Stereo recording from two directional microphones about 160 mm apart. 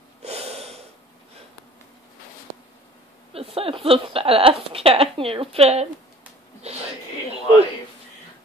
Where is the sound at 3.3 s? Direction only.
35° right (ahead or behind).